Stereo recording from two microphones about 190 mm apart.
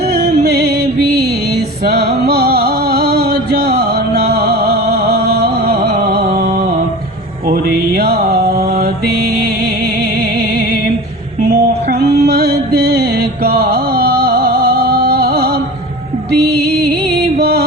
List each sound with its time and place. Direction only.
0.1 s music: 60° right (ahead or behind)
7.4 s mantra: 50° right (ahead or behind)
11.9 s music: 55° right (ahead or behind)